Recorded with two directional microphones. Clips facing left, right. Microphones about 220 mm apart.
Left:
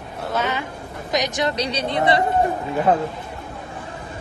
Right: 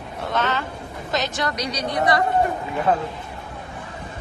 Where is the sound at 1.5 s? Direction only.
30° left (ahead or behind).